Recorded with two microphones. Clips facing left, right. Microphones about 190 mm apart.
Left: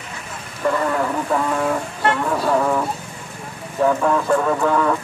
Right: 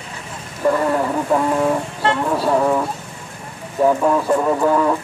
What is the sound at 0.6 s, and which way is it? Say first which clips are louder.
Speech: right 3 dB; 15° right (ahead or behind).